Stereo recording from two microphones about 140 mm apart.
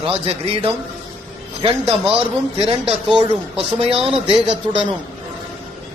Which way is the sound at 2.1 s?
40° right (ahead or behind).